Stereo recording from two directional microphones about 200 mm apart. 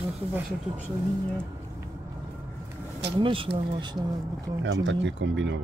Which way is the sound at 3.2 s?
25° right (ahead or behind).